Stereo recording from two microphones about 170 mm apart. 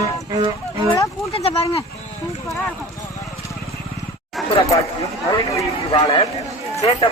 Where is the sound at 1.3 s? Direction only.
35° left (ahead or behind).